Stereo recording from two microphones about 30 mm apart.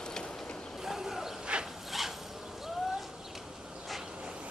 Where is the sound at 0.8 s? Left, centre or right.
Centre.